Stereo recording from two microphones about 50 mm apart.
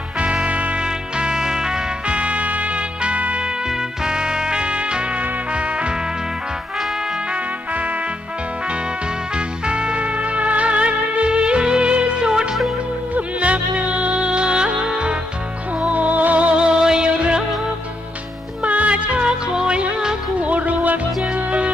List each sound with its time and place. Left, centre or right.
0.4 s music: right
3.4 s music: centre
7.7 s music: right
9.3 s music: centre
15.8 s music: right
18.6 s music: right
20.5 s music: right